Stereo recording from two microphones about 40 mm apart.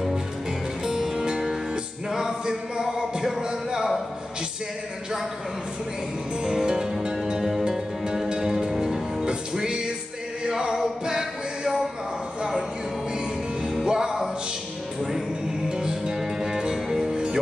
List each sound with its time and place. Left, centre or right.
0.8 s music: centre
2.0 s a sound: centre
6.4 s music: centre
9.2 s music: right
13.8 s music: centre
15.7 s music: centre